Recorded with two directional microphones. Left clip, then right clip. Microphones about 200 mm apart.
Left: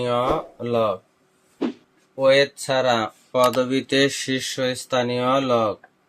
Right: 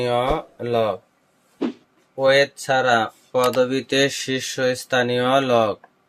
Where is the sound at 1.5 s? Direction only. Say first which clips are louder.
Right 1 dB; centre (ahead or behind).